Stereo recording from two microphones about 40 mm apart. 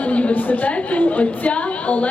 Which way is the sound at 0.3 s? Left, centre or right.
Left.